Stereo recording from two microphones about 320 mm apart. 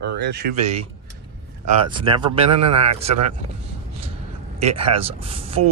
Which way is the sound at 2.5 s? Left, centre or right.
Right.